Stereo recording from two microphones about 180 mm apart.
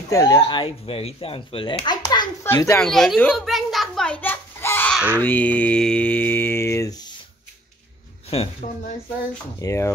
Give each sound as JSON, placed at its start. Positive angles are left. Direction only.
{"t": 0.1, "sound": "speech", "side_deg": 20}
{"t": 2.4, "sound": "mantra", "side_deg": 15}
{"t": 2.8, "sound": "a child's voice", "side_deg": 0}
{"t": 4.9, "sound": "a sound", "side_deg": -10}
{"t": 5.2, "sound": "mantra", "side_deg": 10}
{"t": 8.3, "sound": "a woman's voice", "side_deg": 35}
{"t": 9.6, "sound": "mantra", "side_deg": 15}